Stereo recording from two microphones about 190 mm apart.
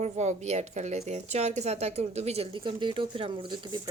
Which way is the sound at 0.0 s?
40° right (ahead or behind).